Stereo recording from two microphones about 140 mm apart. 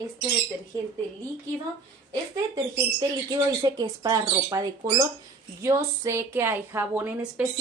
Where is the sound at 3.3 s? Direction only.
30° right (ahead or behind); by 7.4 s 10° right (ahead or behind).